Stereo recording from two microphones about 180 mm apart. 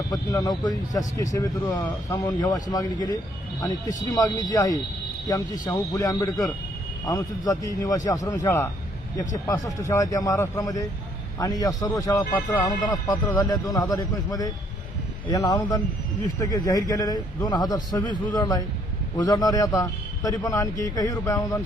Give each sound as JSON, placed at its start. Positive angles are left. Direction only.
{"t": 0.1, "sound": "a man's voice", "side_deg": 20}
{"t": 4.1, "sound": "a man's voice", "side_deg": 20}
{"t": 9.9, "sound": "a man's voice", "side_deg": 20}